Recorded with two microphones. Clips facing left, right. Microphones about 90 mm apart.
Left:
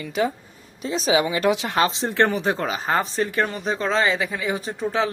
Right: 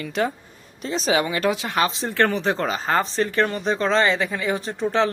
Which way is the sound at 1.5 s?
25° left (ahead or behind).